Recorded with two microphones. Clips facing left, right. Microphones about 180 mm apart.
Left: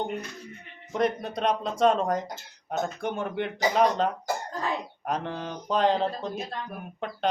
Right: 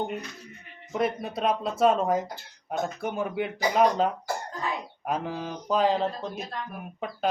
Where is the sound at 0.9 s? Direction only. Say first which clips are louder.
Left 1 dB; 5° right (ahead or behind).